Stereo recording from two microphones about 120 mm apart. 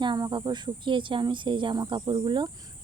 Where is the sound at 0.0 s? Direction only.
40° right (ahead or behind).